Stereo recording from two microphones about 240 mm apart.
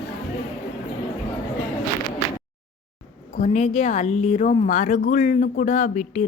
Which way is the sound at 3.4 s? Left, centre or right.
Left.